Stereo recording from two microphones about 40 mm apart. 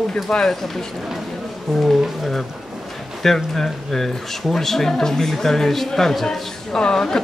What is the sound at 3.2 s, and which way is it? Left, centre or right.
Speech, centre.